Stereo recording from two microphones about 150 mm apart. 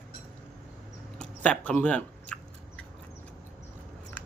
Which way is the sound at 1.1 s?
5° left (ahead or behind).